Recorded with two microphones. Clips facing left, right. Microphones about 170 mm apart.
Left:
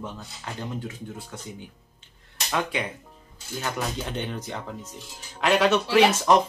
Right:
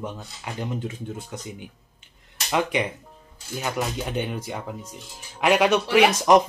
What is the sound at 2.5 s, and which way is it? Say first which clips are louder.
Speech: right 4 dB; 15° right (ahead or behind).